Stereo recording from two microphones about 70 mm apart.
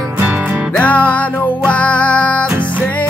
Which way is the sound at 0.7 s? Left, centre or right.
Left.